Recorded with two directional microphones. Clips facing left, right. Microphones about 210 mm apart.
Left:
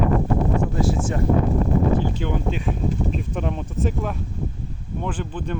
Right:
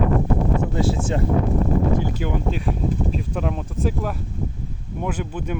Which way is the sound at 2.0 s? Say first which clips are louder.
Even; 5° right (ahead or behind).